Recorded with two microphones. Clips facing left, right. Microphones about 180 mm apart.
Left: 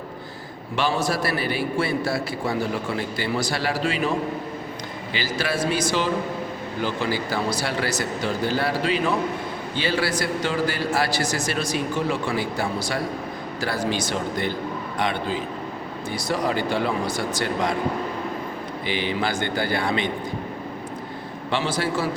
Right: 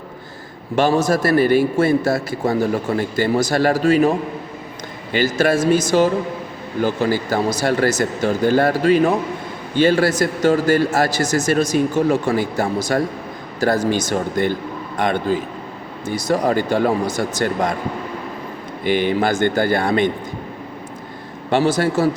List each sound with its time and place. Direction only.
0.8 s a man's voice: 45° right (ahead or behind)
5.1 s a man's voice: 50° right (ahead or behind)
18.9 s a man's voice: 50° right (ahead or behind)
21.5 s a man's voice: 45° right (ahead or behind)